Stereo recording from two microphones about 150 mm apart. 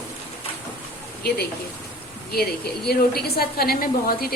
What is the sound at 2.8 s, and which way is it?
A woman's voice, 90° left.